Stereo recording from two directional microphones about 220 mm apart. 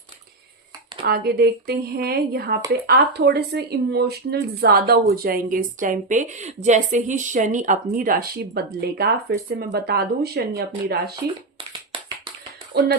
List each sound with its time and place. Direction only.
1.0 s speech: 45° right (ahead or behind)
12.7 s speech: 45° right (ahead or behind)